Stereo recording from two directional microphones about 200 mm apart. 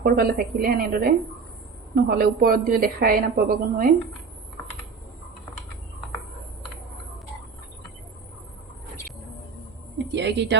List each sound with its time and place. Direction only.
0.0 s a woman's voice: 50° right (ahead or behind)
10.1 s a woman's voice: 60° right (ahead or behind)